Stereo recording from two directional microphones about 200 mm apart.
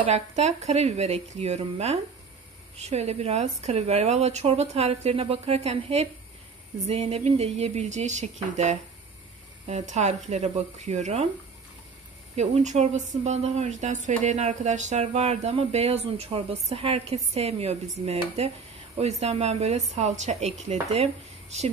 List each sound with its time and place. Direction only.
0.0 s speech: 35° right (ahead or behind)
12.4 s speech: 35° right (ahead or behind)